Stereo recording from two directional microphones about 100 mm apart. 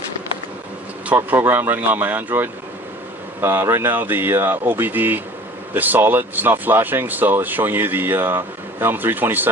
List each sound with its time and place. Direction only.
1.1 s speech: 20° right (ahead or behind)